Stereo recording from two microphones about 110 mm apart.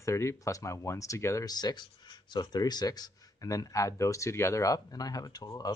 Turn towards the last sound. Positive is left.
turn(degrees=35)  # may be behind; listen again after turning